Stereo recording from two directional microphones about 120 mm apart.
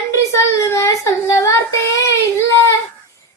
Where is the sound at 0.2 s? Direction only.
25° left (ahead or behind).